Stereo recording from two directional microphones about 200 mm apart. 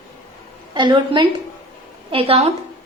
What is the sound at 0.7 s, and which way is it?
A woman's voice, 20° right (ahead or behind).